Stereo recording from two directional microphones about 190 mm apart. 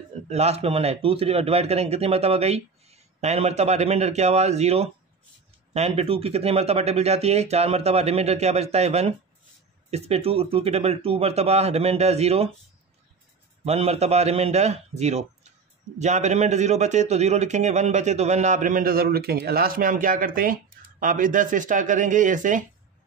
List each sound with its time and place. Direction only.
0.3 s a man's voice: 35° right (ahead or behind)
13.7 s a man's voice: 35° right (ahead or behind)